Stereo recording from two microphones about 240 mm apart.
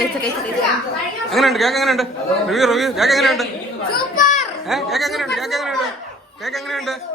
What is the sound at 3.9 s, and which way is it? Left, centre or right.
Children playing, left.